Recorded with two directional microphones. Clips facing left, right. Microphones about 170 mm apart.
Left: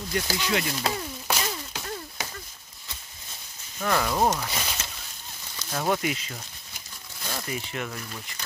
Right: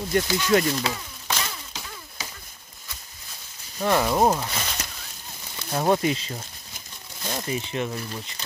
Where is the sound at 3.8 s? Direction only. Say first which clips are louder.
Right 4 dB; 20° right (ahead or behind).